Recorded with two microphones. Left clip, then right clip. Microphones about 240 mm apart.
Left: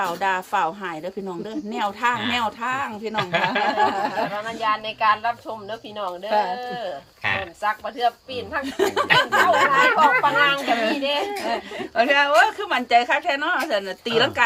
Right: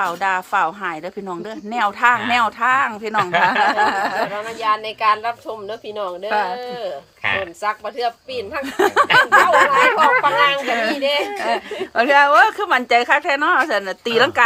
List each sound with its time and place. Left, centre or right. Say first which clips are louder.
0.0 s a woman's voice: right 3 dB; centre
4.6 s a woman's voice: right 3 dB; right
6.2 s a woman's voice: right 1 dB; centre
7.6 s a woman's voice: right 1 dB; right
8.6 s a woman's voice: right 7 dB; centre
10.2 s a woman's voice: right 3 dB; right
11.4 s a woman's voice: right 5 dB; centre